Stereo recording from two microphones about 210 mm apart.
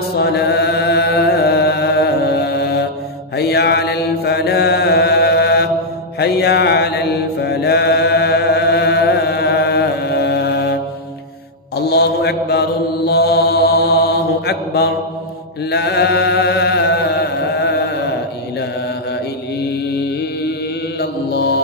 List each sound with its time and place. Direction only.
0.2 s chant: 50° left (ahead or behind)
3.3 s mantra: 50° left (ahead or behind)
11.7 s mantra: 50° left (ahead or behind)
15.7 s chant: 50° left (ahead or behind)
21.0 s mantra: 50° left (ahead or behind)